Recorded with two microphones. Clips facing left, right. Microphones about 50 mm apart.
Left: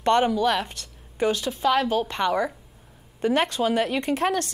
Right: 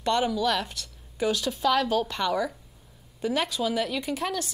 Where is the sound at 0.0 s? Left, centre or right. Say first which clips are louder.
Left 5 dB; left.